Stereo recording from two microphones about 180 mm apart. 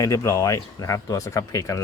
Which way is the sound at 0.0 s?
20° left (ahead or behind).